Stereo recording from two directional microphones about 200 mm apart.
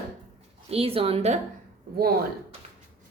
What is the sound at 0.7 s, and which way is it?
Speech, 30° right (ahead or behind).